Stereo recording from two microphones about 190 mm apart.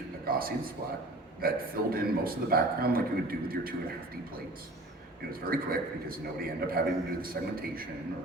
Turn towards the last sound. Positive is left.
turn(degrees=-50)  # may be behind; listen again after turning